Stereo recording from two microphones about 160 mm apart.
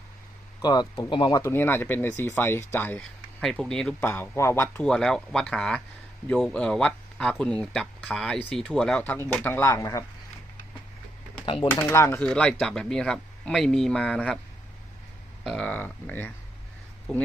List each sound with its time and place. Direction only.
0.6 s speech: 25° left (ahead or behind)
1.4 s speech: 15° left (ahead or behind)
4.1 s speech: 15° left (ahead or behind)
11.4 s speech: 35° left (ahead or behind)
11.7 s speech: 15° left (ahead or behind)
15.4 s speech: 5° left (ahead or behind)